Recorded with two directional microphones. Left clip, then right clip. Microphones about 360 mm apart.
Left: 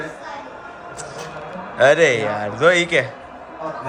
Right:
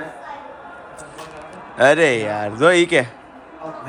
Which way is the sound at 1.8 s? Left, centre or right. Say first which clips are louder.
Even; centre.